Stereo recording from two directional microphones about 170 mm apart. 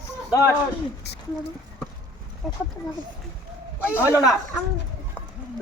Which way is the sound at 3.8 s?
15° left (ahead or behind).